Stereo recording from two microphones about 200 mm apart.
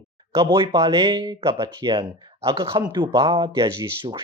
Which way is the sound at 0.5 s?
15° right (ahead or behind).